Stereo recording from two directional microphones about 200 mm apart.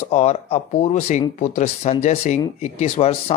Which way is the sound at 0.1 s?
35° left (ahead or behind).